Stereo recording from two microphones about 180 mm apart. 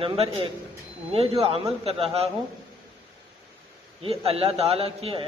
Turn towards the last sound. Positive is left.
turn(degrees=-30)  # may be behind; listen again after turning